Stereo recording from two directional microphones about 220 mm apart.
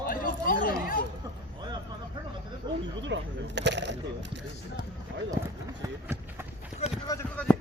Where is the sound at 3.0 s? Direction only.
55° right (ahead or behind).